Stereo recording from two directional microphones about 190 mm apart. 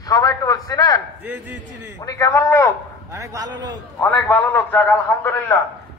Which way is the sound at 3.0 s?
15° right (ahead or behind).